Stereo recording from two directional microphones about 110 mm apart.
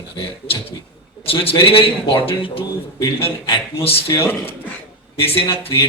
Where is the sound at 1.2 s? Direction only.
55° left (ahead or behind).